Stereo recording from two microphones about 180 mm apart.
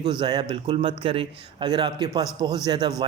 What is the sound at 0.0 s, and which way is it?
A man's voice, 25° right (ahead or behind).